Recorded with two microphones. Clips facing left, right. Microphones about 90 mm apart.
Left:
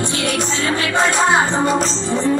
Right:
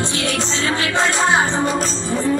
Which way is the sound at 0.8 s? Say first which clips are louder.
Left 2 dB; 25° left (ahead or behind).